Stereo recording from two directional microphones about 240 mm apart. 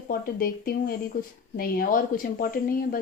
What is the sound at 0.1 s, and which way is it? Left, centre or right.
A woman's voice, left.